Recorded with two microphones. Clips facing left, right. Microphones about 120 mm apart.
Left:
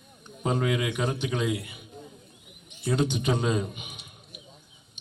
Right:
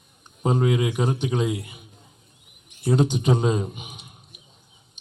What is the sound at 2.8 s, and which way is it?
A man's voice, 35° right (ahead or behind).